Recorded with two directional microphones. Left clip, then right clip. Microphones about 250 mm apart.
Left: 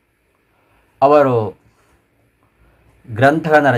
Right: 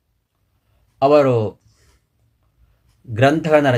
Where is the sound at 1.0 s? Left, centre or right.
Centre.